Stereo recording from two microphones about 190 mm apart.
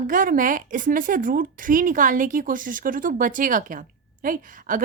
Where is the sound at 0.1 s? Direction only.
45° right (ahead or behind).